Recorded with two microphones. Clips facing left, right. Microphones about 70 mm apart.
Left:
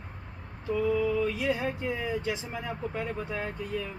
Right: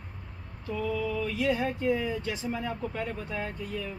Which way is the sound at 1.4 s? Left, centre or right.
Centre.